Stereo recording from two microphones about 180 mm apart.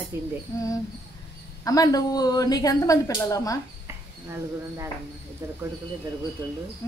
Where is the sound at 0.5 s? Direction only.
20° left (ahead or behind).